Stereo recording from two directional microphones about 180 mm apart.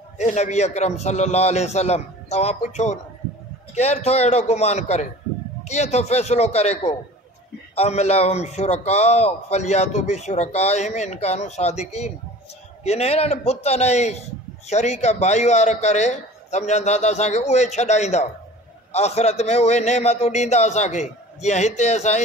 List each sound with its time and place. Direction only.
0.2 s a man's voice: 40° left (ahead or behind)